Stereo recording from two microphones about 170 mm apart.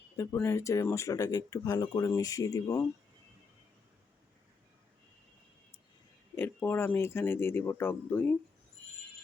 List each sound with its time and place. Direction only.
0.3 s speech: 15° left (ahead or behind)
6.3 s speech: 15° left (ahead or behind)